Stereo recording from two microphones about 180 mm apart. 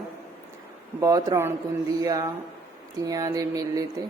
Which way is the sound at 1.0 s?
20° right (ahead or behind).